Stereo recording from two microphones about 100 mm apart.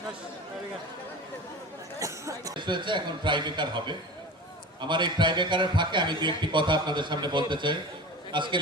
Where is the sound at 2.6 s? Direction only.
50° right (ahead or behind).